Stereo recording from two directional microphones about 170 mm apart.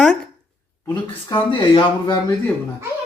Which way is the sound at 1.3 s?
25° left (ahead or behind).